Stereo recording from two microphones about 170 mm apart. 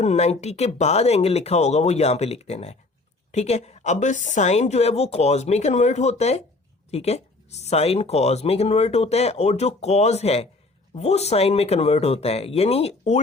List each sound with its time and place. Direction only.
0.0 s speech: 40° left (ahead or behind)